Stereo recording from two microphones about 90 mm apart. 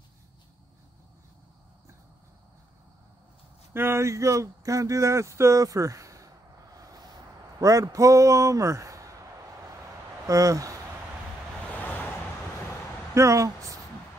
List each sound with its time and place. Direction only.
3.7 s speech: 30° right (ahead or behind)
10.2 s speech: 35° right (ahead or behind)
11.7 s vehicle: 20° left (ahead or behind)
13.1 s speech: 35° right (ahead or behind)